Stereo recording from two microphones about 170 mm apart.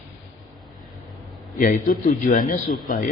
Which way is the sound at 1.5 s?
55° left (ahead or behind).